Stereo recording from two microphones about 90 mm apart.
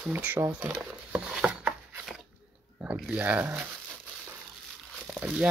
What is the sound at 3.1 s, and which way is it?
Speech, 20° right (ahead or behind).